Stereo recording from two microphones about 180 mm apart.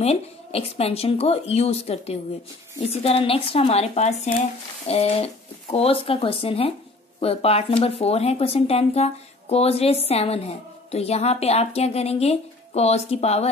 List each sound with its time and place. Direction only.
0.0 s speech: 35° left (ahead or behind)